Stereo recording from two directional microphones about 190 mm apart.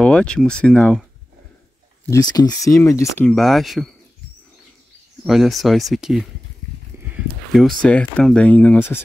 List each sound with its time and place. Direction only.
0.0 s speech: 5° left (ahead or behind)
2.3 s speech: 20° left (ahead or behind)
3.3 s speech: centre (ahead or behind)
5.2 s speech: centre (ahead or behind)
7.5 s speech: 5° left (ahead or behind)